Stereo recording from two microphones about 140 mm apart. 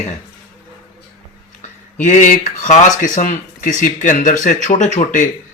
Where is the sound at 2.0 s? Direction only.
65° left (ahead or behind).